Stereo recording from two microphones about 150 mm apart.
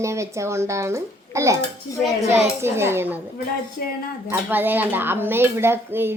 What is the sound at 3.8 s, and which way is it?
Speech, 85° left.